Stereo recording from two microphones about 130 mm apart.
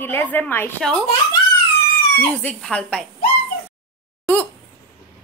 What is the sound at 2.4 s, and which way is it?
Speech, 5° left (ahead or behind).